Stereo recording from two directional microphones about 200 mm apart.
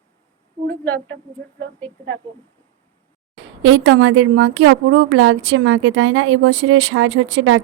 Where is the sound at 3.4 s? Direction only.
70° right (ahead or behind).